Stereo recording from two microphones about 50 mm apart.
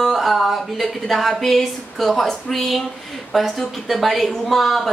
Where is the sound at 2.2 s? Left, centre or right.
Centre.